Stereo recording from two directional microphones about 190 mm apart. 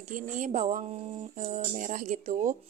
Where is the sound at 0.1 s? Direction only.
40° right (ahead or behind).